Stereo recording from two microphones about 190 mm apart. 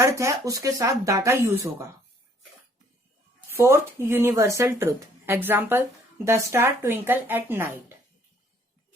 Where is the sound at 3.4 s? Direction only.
15° right (ahead or behind).